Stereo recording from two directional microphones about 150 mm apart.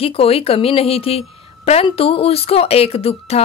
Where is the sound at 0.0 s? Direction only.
40° left (ahead or behind).